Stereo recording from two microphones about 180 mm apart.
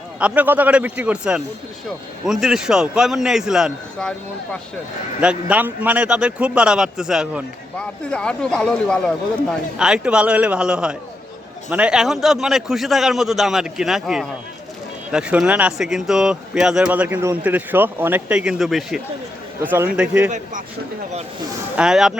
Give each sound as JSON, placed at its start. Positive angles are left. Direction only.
{"t": 0.2, "sound": "a man's voice", "side_deg": -10}
{"t": 5.2, "sound": "a man's voice", "side_deg": -5}
{"t": 19.6, "sound": "a man's voice", "side_deg": -10}
{"t": 20.3, "sound": "a man's voice", "side_deg": -45}
{"t": 21.8, "sound": "a man's voice", "side_deg": -5}